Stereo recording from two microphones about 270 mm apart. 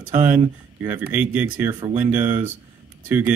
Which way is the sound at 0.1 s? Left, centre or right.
Centre.